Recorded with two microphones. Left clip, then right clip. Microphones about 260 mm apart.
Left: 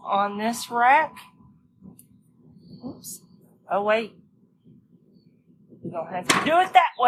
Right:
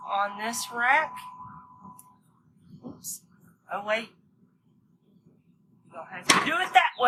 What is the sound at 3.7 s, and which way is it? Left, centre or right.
Speech, left.